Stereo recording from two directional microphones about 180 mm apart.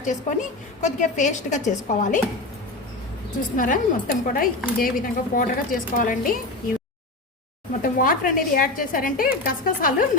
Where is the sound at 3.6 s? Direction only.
50° left (ahead or behind).